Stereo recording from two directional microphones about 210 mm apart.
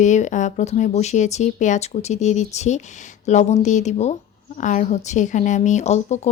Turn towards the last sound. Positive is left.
turn(degrees=30)  # may be behind; listen again after turning